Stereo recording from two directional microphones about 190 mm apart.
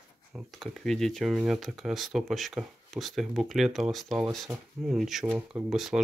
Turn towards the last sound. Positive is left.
turn(degrees=0)  # may be behind; listen again after turning